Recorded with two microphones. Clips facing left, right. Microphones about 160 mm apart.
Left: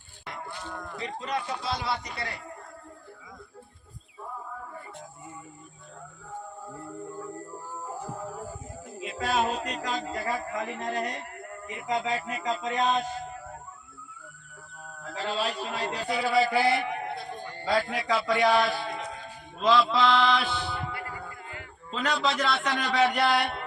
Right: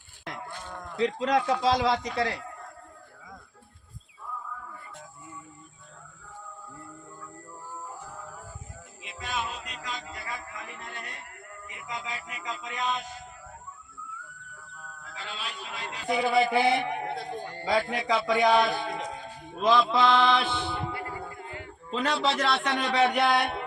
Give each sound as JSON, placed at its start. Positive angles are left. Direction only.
{"t": 0.9, "sound": "a man's voice", "side_deg": -90}
{"t": 7.9, "sound": "music", "side_deg": 35}
{"t": 15.0, "sound": "music", "side_deg": 40}
{"t": 16.0, "sound": "a man's voice", "side_deg": -20}
{"t": 19.6, "sound": "chant", "side_deg": -20}